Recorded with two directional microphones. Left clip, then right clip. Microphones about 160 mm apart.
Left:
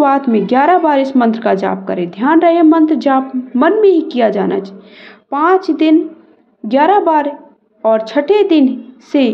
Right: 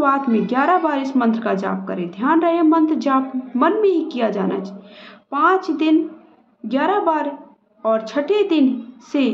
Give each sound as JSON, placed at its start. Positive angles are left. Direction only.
{"t": 0.0, "sound": "a woman's voice", "side_deg": 40}